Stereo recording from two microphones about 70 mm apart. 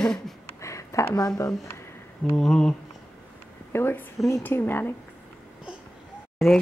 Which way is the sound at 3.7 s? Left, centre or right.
Left.